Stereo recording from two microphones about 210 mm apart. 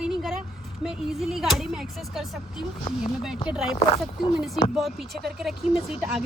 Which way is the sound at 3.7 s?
25° left (ahead or behind).